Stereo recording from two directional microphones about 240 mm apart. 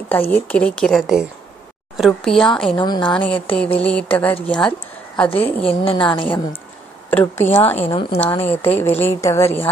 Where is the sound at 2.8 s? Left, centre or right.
Centre.